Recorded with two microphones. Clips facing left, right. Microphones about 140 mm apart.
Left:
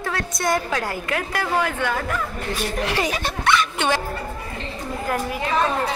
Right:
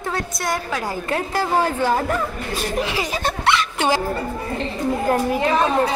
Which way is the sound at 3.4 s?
30° right (ahead or behind).